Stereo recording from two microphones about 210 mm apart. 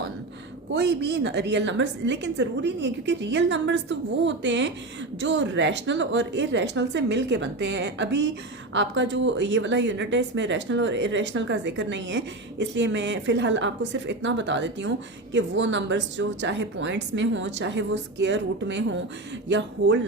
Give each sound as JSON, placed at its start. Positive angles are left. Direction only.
{"t": 0.7, "sound": "speech", "side_deg": -55}